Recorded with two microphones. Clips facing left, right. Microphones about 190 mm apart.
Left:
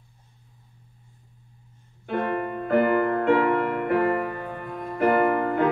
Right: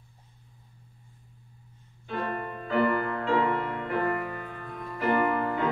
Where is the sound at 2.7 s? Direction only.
55° left (ahead or behind).